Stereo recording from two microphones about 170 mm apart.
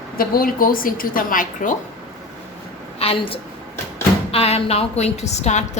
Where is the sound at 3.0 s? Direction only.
35° left (ahead or behind).